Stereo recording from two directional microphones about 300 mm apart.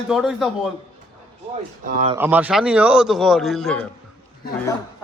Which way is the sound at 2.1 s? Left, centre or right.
Centre.